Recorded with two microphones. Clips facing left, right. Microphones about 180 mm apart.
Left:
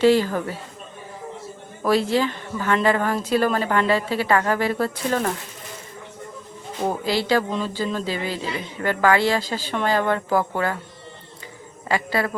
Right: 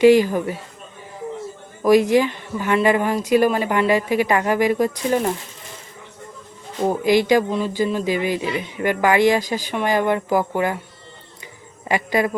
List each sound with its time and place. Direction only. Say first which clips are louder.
0.0 s speech: right 4 dB; 15° right (ahead or behind)
1.8 s speech: right 5 dB; 15° right (ahead or behind)
6.8 s speech: right 6 dB; 15° right (ahead or behind)
11.9 s speech: right 3 dB; 15° right (ahead or behind)